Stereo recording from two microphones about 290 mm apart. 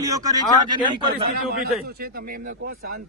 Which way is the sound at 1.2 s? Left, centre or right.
Right.